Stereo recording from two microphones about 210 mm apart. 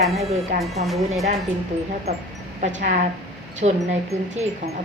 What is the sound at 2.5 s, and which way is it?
A woman's voice, 35° right (ahead or behind).